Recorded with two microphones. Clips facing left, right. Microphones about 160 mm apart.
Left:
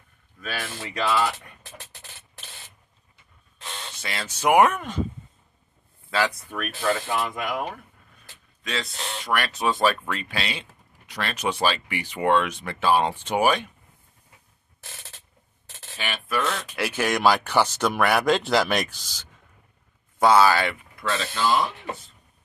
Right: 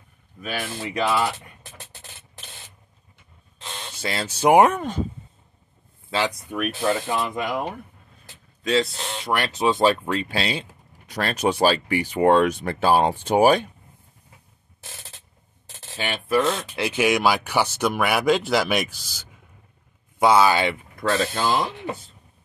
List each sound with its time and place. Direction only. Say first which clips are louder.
0.4 s speech: right 3 dB; 20° right (ahead or behind)
4.0 s speech: right 5 dB; 30° right (ahead or behind)
6.0 s speech: even; 25° right (ahead or behind)
16.0 s speech: right 6 dB; 30° right (ahead or behind)
21.0 s speech: right 3 dB; 45° right (ahead or behind)